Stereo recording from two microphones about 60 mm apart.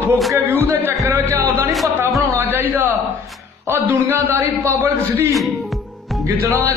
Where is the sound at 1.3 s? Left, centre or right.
Right.